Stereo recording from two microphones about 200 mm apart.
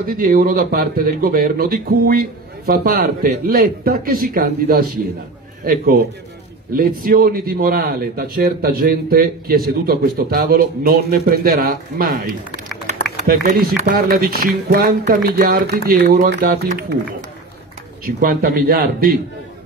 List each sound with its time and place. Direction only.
0.0 s speech: 45° right (ahead or behind)
18.0 s speech: 50° right (ahead or behind)